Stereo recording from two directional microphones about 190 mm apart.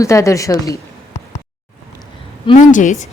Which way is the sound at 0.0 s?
15° left (ahead or behind).